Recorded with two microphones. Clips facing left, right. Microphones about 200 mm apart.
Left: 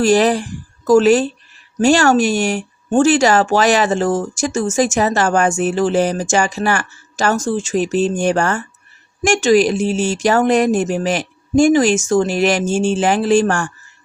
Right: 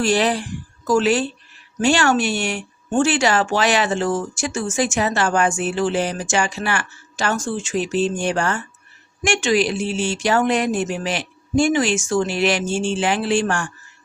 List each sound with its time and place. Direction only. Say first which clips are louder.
0.0 s speech: left 6 dB; 45° left (ahead or behind)